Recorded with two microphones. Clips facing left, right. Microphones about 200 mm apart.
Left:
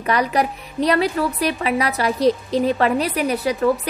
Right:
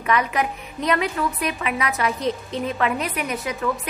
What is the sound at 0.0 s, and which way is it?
Speech, 35° left (ahead or behind).